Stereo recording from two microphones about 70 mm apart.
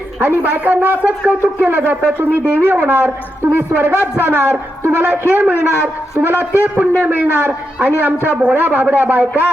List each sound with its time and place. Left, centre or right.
0.2 s a man's voice: right